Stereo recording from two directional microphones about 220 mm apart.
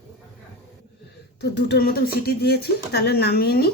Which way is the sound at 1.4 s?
50° left (ahead or behind).